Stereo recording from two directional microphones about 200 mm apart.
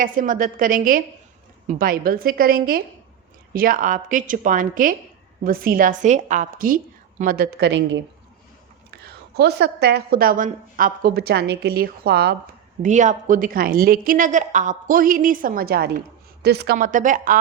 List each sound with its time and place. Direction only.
0.0 s a woman's voice: 40° right (ahead or behind); by 8.0 s 65° right (ahead or behind)
9.3 s a woman's voice: 55° right (ahead or behind)
12.8 s a woman's voice: 40° right (ahead or behind)